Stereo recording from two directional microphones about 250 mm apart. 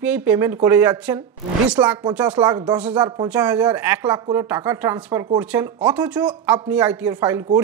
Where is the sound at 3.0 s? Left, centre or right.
Centre.